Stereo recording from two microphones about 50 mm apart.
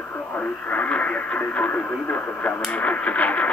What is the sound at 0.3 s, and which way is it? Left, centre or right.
Speech, left.